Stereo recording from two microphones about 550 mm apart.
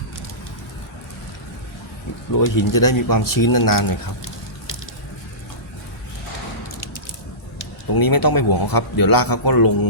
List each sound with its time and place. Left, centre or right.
2.3 s speech: left
7.9 s speech: left